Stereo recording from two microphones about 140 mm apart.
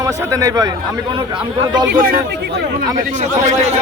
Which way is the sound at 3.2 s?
55° right (ahead or behind).